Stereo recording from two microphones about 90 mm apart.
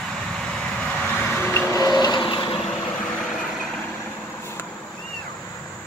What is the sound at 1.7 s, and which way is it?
Vehicle, 45° left (ahead or behind).